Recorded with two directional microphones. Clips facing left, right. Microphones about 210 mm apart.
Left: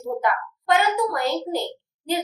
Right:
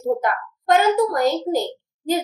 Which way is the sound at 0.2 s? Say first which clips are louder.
Even; 45° right (ahead or behind).